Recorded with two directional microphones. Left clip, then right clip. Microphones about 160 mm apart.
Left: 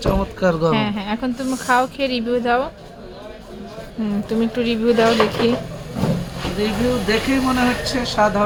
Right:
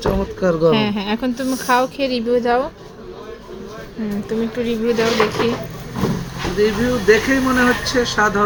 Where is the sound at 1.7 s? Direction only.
10° right (ahead or behind).